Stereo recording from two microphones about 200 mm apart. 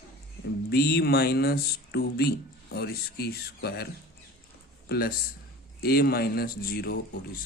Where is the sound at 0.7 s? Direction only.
50° left (ahead or behind).